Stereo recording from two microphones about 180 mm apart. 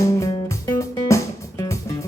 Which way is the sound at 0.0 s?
15° left (ahead or behind).